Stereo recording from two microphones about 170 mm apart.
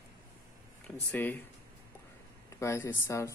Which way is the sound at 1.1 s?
10° left (ahead or behind).